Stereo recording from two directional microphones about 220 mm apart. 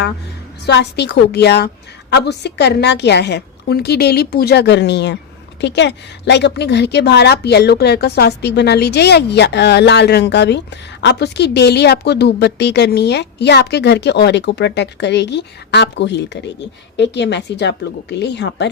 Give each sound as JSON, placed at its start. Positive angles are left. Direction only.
{"t": 0.6, "sound": "a woman's voice", "side_deg": 50}